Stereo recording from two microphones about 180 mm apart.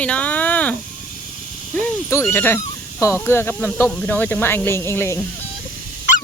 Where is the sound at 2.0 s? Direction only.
15° left (ahead or behind).